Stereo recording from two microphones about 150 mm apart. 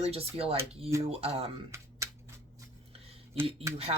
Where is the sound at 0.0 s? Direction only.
40° right (ahead or behind).